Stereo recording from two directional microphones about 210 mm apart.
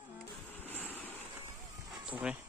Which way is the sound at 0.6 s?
10° left (ahead or behind).